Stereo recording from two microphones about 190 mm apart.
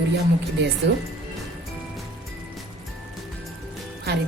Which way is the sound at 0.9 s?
70° right (ahead or behind).